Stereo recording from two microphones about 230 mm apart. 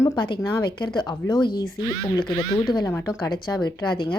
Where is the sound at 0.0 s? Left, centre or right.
Centre.